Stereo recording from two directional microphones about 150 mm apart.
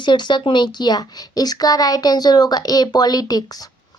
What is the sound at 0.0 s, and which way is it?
A child's voice, 30° left (ahead or behind).